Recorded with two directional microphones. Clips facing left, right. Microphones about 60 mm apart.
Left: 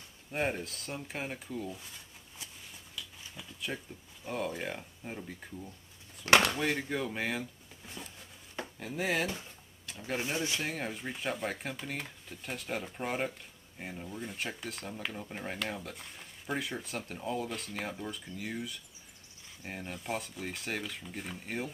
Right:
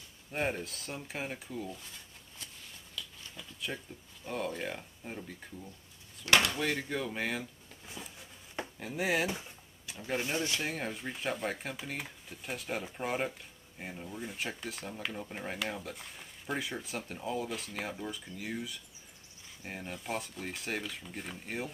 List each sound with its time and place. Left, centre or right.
0.3 s speech: centre
6.2 s speech: left
6.6 s speech: centre